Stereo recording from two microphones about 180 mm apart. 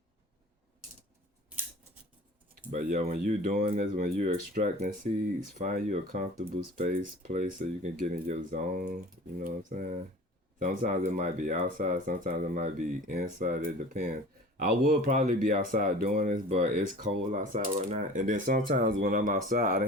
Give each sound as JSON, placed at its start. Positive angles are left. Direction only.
{"t": 2.7, "sound": "speech", "side_deg": -50}